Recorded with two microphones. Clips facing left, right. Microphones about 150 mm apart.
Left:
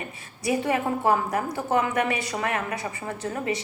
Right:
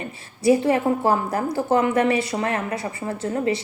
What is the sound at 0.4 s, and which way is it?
A woman's voice, 30° right (ahead or behind).